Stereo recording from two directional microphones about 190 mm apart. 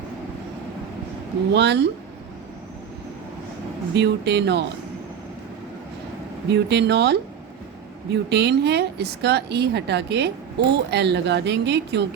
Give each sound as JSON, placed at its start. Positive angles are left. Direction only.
{"t": 1.5, "sound": "speech", "side_deg": -65}
{"t": 3.9, "sound": "speech", "side_deg": -65}
{"t": 6.5, "sound": "speech", "side_deg": -60}